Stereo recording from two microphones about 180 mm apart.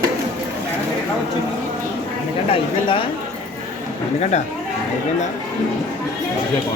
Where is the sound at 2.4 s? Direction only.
30° left (ahead or behind).